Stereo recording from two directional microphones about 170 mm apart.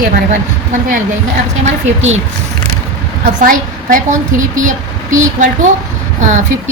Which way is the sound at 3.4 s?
50° right (ahead or behind).